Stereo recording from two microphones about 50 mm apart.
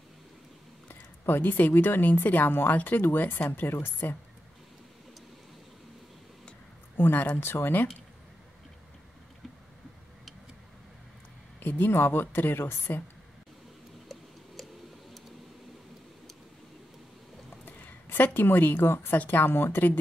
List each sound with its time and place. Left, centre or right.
0.8 s a woman's voice: left
7.0 s speech: left
11.6 s speech: left
11.9 s a woman's voice: left
18.0 s a woman's voice: left